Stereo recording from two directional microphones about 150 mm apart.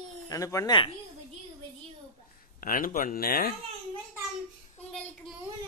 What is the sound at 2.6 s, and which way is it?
Speech, 65° left (ahead or behind).